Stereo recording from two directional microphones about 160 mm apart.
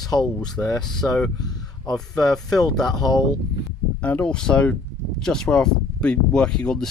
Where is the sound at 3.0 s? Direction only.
25° left (ahead or behind).